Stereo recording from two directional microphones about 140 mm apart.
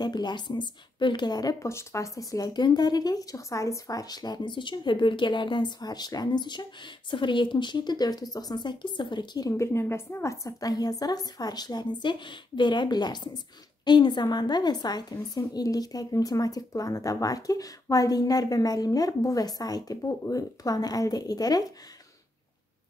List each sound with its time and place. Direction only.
0.0 s a woman's voice: 30° left (ahead or behind)